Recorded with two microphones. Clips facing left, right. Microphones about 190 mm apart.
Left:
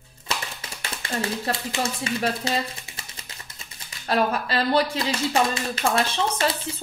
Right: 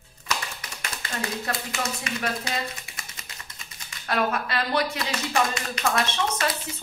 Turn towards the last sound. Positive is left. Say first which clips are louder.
# left 2 dB
turn(degrees=30)  # may be behind; listen again after turning